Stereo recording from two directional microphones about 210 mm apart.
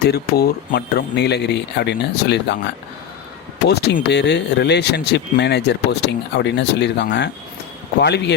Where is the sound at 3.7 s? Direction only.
50° left (ahead or behind).